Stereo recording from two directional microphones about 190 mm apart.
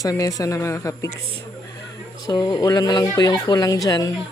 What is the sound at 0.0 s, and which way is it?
Speech, 20° left (ahead or behind).